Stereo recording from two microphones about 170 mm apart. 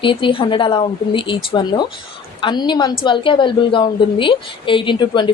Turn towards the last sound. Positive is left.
turn(degrees=25)  # may be behind; listen again after turning